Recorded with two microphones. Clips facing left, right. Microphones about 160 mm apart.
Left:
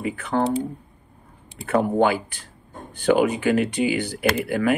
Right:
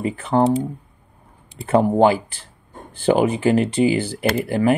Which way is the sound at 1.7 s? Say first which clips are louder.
Right 4 dB; 30° right (ahead or behind).